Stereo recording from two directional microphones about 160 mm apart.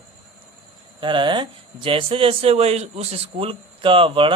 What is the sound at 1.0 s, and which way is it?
A man's voice, 30° right (ahead or behind).